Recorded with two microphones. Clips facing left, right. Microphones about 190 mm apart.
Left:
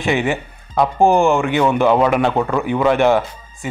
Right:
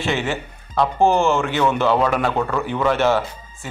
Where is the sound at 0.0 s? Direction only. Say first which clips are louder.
Left 4 dB; 15° left (ahead or behind).